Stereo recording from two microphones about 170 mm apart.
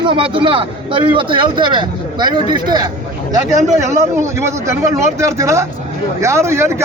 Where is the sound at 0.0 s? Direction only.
30° right (ahead or behind).